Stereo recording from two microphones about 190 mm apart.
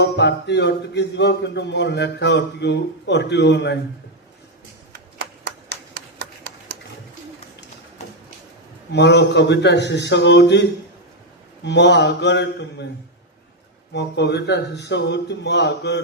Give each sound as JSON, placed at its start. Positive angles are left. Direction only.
{"t": 0.0, "sound": "speech", "side_deg": 65}
{"t": 5.5, "sound": "hands", "side_deg": -60}
{"t": 8.9, "sound": "speech", "side_deg": 65}
{"t": 13.9, "sound": "speech", "side_deg": 60}